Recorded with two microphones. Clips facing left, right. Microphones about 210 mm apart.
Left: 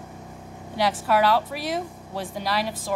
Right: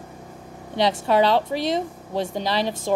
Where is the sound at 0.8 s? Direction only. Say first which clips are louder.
Right 3 dB; 25° right (ahead or behind).